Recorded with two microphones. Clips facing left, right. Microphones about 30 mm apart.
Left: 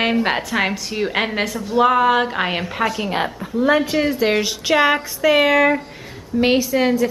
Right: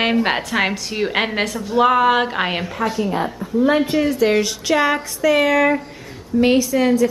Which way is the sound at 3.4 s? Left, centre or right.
Left.